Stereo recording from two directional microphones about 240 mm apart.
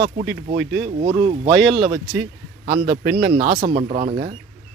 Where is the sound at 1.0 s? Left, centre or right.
Right.